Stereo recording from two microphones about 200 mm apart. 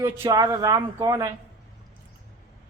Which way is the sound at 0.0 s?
15° right (ahead or behind).